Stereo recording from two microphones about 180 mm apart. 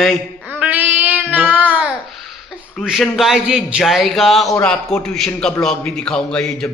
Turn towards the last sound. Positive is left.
turn(degrees=0)  # may be behind; listen again after turning